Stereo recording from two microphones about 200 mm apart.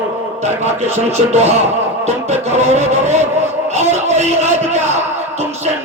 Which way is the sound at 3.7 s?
35° right (ahead or behind).